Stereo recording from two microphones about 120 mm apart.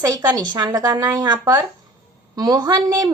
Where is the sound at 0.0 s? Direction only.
30° right (ahead or behind).